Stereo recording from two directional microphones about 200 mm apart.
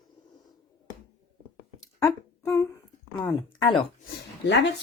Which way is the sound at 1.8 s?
15° left (ahead or behind).